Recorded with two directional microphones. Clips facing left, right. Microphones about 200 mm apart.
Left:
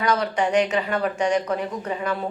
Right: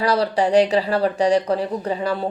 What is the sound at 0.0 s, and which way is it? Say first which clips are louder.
A woman's voice: right 3 dB; 35° right (ahead or behind).